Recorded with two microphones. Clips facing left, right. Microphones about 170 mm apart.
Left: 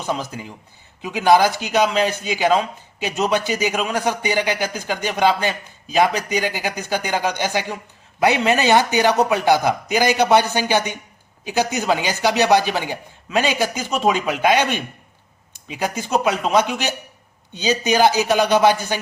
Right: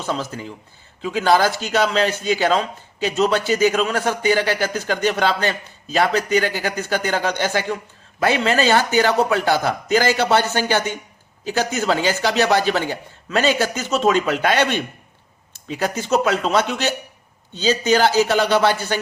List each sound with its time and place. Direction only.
0.0 s speech: 15° left (ahead or behind)